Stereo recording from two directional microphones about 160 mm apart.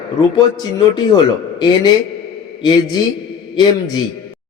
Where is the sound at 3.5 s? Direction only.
25° left (ahead or behind).